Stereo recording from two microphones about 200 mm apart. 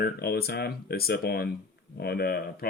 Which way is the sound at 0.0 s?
50° left (ahead or behind).